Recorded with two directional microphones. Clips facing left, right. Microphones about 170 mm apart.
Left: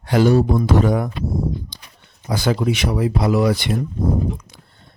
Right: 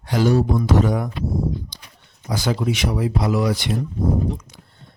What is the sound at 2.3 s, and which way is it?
Speech, 60° left (ahead or behind).